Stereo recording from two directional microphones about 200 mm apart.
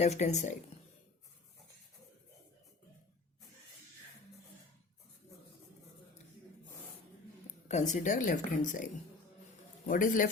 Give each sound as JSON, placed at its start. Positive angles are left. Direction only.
{"t": 0.0, "sound": "a woman's voice", "side_deg": 35}
{"t": 7.7, "sound": "a woman's voice", "side_deg": 35}